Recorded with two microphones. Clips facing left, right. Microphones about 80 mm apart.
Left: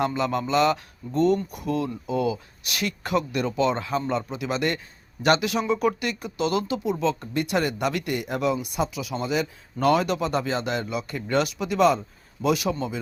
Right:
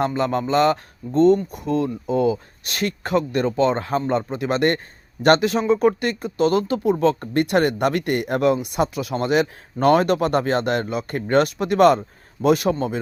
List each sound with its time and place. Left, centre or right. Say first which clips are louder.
0.0 s speech: right 3 dB; right
7.0 s speech: right 6 dB; right
9.8 s speech: right 5 dB; right